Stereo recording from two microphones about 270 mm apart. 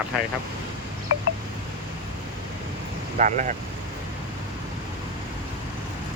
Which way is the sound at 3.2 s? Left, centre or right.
Right.